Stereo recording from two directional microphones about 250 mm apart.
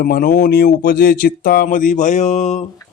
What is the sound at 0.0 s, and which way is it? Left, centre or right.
A man's voice, left.